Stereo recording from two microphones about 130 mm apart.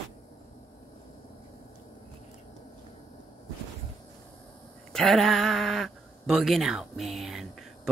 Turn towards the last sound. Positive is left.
turn(degrees=0)  # may be behind; listen again after turning